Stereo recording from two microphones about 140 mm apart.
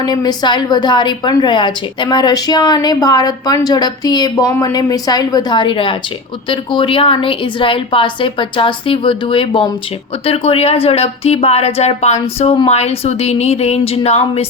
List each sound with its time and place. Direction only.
0.0 s a woman's voice: 30° left (ahead or behind); by 14.4 s 45° left (ahead or behind)